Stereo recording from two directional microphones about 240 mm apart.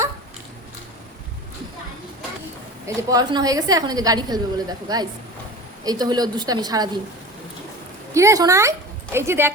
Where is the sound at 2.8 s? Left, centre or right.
Centre.